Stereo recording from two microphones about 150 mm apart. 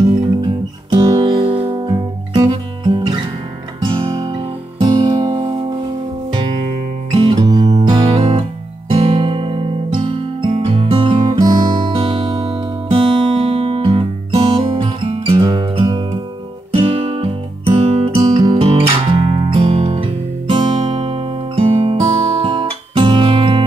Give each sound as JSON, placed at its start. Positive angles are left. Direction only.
{"t": 0.9, "sound": "guitar", "side_deg": -35}
{"t": 3.8, "sound": "music", "side_deg": -35}
{"t": 7.1, "sound": "music", "side_deg": -40}
{"t": 7.3, "sound": "music", "side_deg": -25}
{"t": 18.4, "sound": "music", "side_deg": -30}
{"t": 18.7, "sound": "guitar", "side_deg": -35}